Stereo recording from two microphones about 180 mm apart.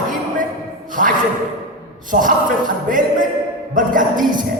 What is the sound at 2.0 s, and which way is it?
Speech, 50° right (ahead or behind).